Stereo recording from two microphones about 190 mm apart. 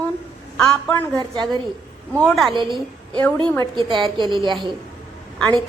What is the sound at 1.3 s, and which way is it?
Speech, 20° right (ahead or behind).